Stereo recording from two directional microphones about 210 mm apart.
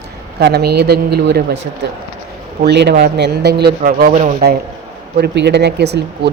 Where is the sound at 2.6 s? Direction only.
50° right (ahead or behind); by 4.4 s 35° right (ahead or behind).